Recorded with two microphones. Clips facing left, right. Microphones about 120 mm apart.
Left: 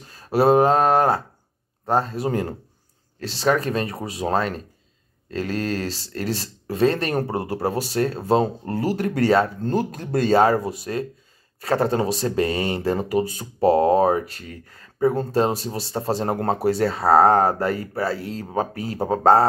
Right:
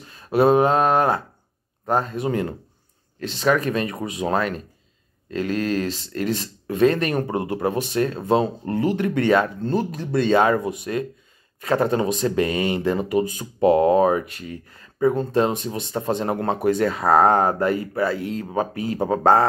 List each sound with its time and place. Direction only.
0.0 s speech: 35° left (ahead or behind)